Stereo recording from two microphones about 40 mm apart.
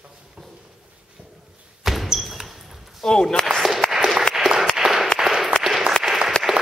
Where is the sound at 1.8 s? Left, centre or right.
Centre.